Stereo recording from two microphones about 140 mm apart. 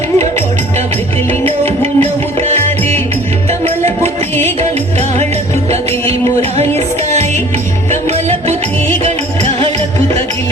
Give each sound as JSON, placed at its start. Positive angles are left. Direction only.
{"t": 1.5, "sound": "music", "side_deg": -50}
{"t": 6.6, "sound": "music", "side_deg": -50}